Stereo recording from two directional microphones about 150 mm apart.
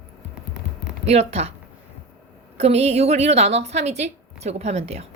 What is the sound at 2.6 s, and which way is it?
A woman's voice, 45° right (ahead or behind).